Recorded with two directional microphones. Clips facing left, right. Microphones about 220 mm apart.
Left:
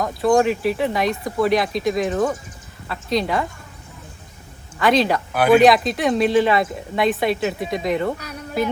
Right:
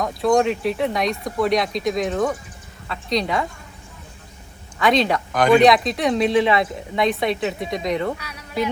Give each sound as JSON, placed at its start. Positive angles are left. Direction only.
{"t": 0.0, "sound": "speech", "side_deg": 0}
{"t": 4.8, "sound": "speech", "side_deg": 0}
{"t": 8.2, "sound": "a sound", "side_deg": 50}